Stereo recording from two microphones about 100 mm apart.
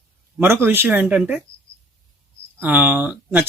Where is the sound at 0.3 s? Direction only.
25° right (ahead or behind).